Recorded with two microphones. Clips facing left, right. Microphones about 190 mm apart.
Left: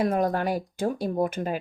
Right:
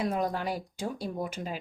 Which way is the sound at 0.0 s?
55° left (ahead or behind).